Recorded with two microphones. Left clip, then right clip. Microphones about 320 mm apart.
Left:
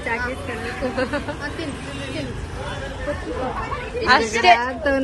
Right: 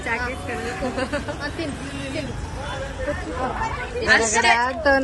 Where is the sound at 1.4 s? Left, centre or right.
Right.